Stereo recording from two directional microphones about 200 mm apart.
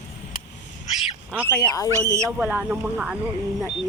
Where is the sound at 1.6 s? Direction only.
15° left (ahead or behind).